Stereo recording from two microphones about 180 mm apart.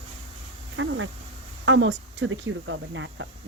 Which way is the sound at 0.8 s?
90° right.